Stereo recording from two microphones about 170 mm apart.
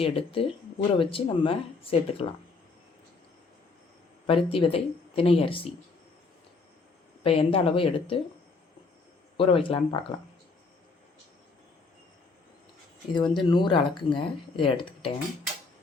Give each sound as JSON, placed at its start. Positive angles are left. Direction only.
{"t": 0.0, "sound": "speech", "side_deg": 30}
{"t": 4.3, "sound": "speech", "side_deg": 30}
{"t": 7.3, "sound": "speech", "side_deg": 35}
{"t": 9.4, "sound": "speech", "side_deg": 30}
{"t": 13.1, "sound": "speech", "side_deg": 25}